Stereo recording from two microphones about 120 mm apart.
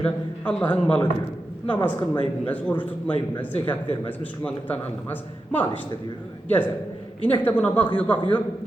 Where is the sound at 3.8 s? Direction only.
50° left (ahead or behind).